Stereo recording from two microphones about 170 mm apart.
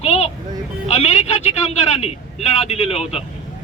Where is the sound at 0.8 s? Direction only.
40° left (ahead or behind).